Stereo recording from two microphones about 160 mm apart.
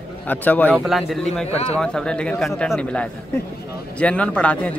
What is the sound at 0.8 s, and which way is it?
Speech, centre (ahead or behind).